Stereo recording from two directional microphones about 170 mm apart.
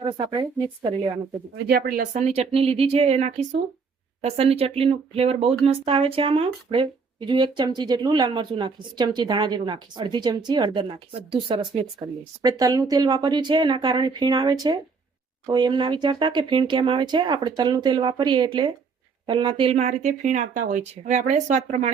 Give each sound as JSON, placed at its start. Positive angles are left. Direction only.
{"t": 0.0, "sound": "a woman's voice", "side_deg": -25}
{"t": 1.6, "sound": "speech", "side_deg": -65}
{"t": 2.0, "sound": "a woman's voice", "side_deg": -45}